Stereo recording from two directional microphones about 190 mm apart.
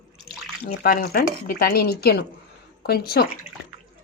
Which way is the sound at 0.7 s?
50° left (ahead or behind).